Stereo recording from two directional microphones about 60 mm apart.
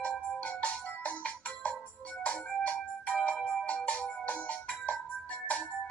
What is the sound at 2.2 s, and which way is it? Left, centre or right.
Music, left.